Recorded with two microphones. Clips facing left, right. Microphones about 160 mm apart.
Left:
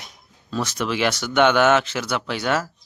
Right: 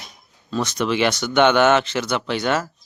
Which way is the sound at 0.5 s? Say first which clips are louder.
Right 3 dB; 5° left (ahead or behind).